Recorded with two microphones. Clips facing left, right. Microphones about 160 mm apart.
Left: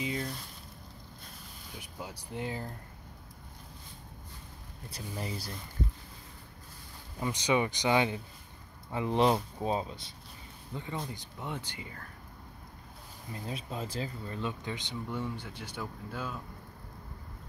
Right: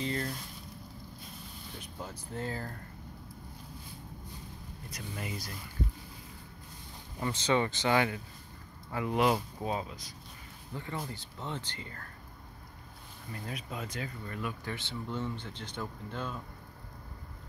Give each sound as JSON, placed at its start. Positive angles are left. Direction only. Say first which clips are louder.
{"t": 0.0, "sound": "speech", "louder": "right 1 dB", "side_deg": 5}
{"t": 1.8, "sound": "speech", "louder": "left 1 dB", "side_deg": 10}
{"t": 4.8, "sound": "speech", "louder": "left 2 dB", "side_deg": 30}
{"t": 7.2, "sound": "speech", "louder": "even", "side_deg": 10}
{"t": 10.7, "sound": "speech", "louder": "left 1 dB", "side_deg": 20}
{"t": 13.3, "sound": "speech", "louder": "left 2 dB", "side_deg": 25}